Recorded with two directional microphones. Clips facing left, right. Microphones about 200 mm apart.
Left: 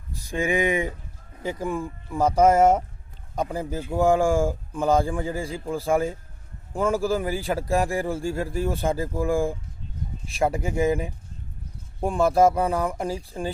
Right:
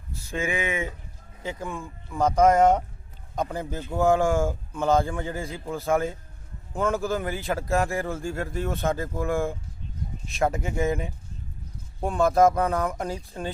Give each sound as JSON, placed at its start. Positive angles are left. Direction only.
{"t": 0.3, "sound": "a man's voice", "side_deg": 15}